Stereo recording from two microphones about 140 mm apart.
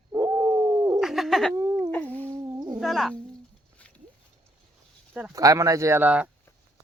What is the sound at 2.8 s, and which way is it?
Speech, centre (ahead or behind).